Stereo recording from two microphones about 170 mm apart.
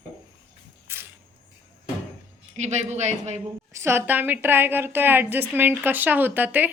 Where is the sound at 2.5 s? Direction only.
40° right (ahead or behind).